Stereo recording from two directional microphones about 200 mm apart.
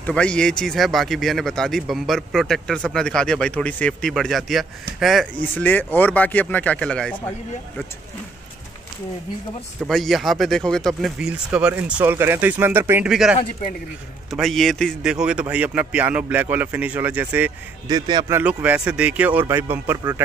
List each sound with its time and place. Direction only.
0.0 s speech: 5° left (ahead or behind)
9.8 s speech: centre (ahead or behind)
17.8 s a man's voice: 20° right (ahead or behind)
18.4 s speech: 5° right (ahead or behind)